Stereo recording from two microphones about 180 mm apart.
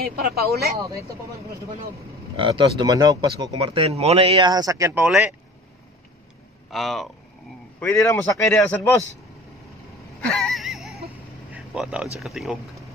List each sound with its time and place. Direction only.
0.0 s speech: 60° right (ahead or behind)
0.7 s speech: 15° right (ahead or behind)
2.3 s speech: 30° right (ahead or behind)
3.7 s speech: 35° right (ahead or behind); by 5.0 s 15° right (ahead or behind)
5.0 s speech: 5° right (ahead or behind)
6.7 s speech: centre (ahead or behind)
8.0 s a man's voice: 15° left (ahead or behind)
10.2 s wheeze: 5° left (ahead or behind)
11.5 s a sound: 5° right (ahead or behind)
12.2 s speech: centre (ahead or behind)